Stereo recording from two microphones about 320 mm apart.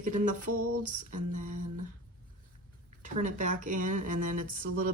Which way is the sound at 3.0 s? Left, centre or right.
Right.